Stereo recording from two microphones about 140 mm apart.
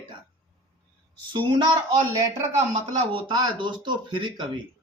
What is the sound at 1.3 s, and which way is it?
Speech, 35° right (ahead or behind).